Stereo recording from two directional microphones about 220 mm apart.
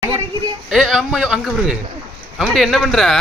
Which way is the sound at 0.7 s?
Centre (ahead or behind).